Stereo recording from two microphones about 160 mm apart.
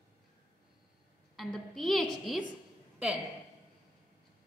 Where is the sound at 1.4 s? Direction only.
Centre (ahead or behind).